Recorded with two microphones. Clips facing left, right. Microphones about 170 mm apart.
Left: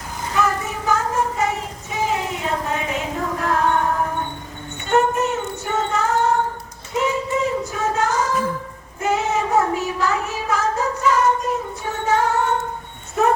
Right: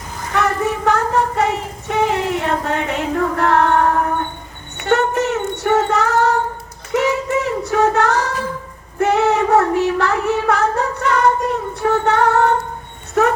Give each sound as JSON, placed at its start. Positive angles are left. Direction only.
{"t": 0.3, "sound": "child singing", "side_deg": -65}